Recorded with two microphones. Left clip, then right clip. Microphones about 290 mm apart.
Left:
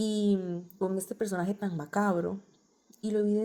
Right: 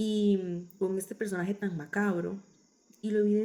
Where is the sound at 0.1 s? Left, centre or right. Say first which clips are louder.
Right 4 dB; left.